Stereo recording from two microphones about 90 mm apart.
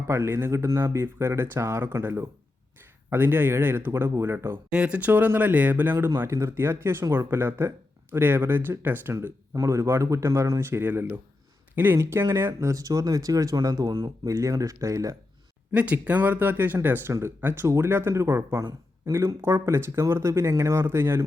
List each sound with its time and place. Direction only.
0.1 s speech: 25° right (ahead or behind)
4.7 s speech: 15° right (ahead or behind)
9.6 s speech: 35° right (ahead or behind)
14.3 s speech: 40° right (ahead or behind)
15.7 s speech: 15° right (ahead or behind)